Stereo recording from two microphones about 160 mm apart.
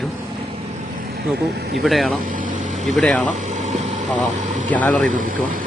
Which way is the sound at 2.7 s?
Centre (ahead or behind).